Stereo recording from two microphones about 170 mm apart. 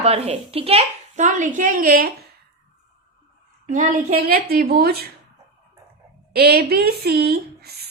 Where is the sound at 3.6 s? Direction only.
45° right (ahead or behind).